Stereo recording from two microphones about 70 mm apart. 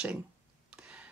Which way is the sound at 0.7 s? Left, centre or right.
Centre.